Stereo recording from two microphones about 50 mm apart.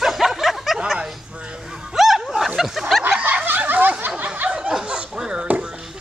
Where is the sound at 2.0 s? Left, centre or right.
Centre.